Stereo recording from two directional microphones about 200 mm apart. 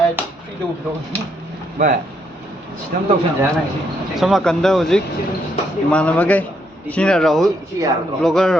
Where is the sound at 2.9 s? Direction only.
45° right (ahead or behind).